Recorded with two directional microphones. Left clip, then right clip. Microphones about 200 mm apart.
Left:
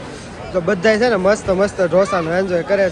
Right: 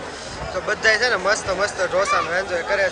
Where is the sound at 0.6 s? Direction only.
10° left (ahead or behind).